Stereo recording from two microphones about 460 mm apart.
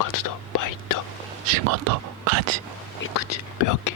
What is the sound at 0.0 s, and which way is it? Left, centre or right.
Whispering, left.